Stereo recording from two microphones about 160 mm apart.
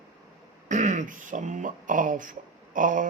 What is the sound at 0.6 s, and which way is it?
Speech, 50° right (ahead or behind).